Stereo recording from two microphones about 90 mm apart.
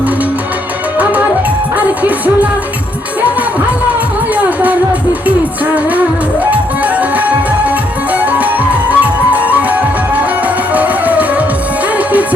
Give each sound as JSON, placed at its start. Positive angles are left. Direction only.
{"t": 2.0, "sound": "music", "side_deg": -15}
{"t": 4.4, "sound": "music", "side_deg": -15}
{"t": 6.5, "sound": "music", "side_deg": -15}
{"t": 10.8, "sound": "music", "side_deg": -15}